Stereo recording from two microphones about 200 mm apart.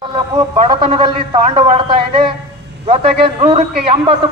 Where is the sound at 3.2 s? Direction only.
30° right (ahead or behind).